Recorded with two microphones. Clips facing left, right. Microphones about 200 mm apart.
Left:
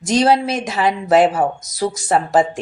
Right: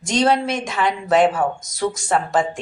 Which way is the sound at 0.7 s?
25° left (ahead or behind).